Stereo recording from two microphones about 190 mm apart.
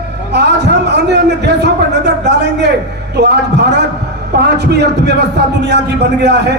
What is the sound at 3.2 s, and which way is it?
A man's voice, 60° right (ahead or behind).